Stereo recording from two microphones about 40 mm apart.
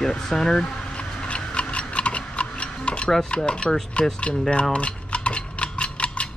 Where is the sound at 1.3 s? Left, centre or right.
Left.